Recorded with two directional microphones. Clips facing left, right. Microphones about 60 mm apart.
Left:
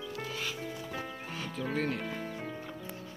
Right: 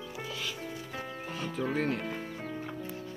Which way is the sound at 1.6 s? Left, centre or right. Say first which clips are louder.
Right 2 dB; centre.